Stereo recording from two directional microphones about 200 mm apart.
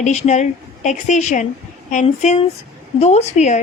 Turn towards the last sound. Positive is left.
turn(degrees=35)  # may be behind; listen again after turning